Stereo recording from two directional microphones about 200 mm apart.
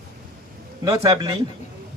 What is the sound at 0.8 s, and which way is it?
Speech, 20° right (ahead or behind).